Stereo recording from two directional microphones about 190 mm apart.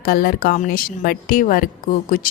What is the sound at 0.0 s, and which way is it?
Speech, 50° left (ahead or behind).